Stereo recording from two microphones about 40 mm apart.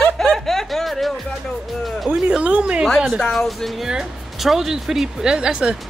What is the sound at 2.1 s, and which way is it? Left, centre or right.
Speech, right.